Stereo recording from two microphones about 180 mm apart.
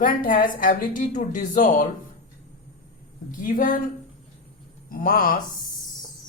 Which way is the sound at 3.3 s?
50° left (ahead or behind).